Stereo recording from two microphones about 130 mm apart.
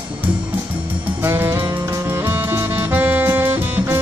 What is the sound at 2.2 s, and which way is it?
Saxophone, 15° right (ahead or behind).